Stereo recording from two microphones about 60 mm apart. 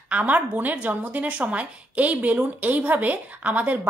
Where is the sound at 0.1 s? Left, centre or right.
Right.